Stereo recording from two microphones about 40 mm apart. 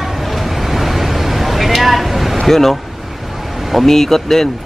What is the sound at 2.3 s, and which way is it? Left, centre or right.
Speech, centre.